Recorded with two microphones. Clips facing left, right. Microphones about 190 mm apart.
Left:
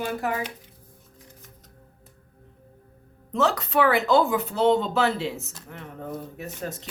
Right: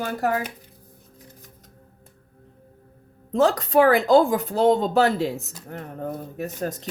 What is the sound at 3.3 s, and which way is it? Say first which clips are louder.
Speech: right 5 dB; 35° right (ahead or behind).